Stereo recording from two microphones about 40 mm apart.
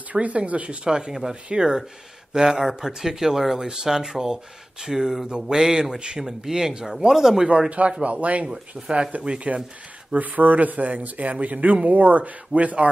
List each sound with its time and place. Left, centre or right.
0.1 s speech: right
0.8 s speech: centre
8.0 s speech: right
8.5 s speech: centre
10.1 s speech: right